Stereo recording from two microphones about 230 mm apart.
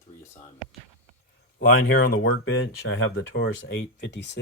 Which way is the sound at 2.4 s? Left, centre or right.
Left.